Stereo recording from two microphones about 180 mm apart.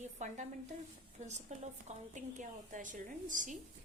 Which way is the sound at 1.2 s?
40° right (ahead or behind).